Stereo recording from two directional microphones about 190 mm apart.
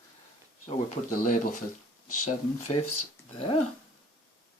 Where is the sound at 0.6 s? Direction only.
40° left (ahead or behind).